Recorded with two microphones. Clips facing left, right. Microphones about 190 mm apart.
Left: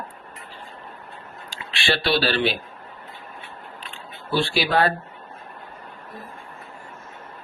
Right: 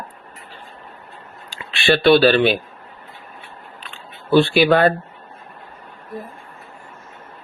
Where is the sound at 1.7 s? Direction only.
55° right (ahead or behind).